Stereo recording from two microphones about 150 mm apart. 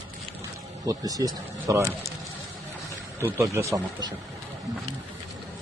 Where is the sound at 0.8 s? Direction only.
25° right (ahead or behind).